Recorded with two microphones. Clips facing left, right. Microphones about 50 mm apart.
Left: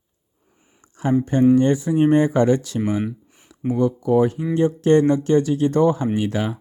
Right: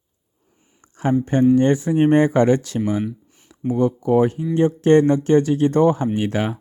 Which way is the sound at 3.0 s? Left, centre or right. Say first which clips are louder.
Even; centre.